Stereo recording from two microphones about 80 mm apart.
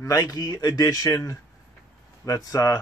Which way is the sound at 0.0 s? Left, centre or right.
Left.